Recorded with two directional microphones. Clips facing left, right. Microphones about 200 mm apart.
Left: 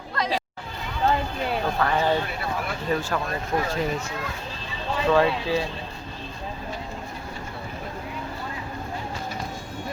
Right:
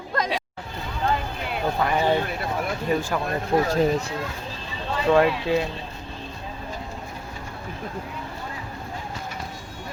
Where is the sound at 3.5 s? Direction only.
30° right (ahead or behind).